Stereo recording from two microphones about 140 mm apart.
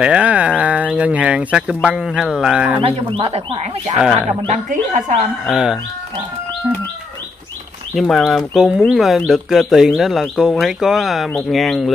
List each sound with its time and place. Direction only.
0.0 s speech: 10° right (ahead or behind)
2.8 s speech: 45° right (ahead or behind)
4.5 s speech: 65° right (ahead or behind)
5.5 s speech: 5° right (ahead or behind)
7.9 s speech: centre (ahead or behind)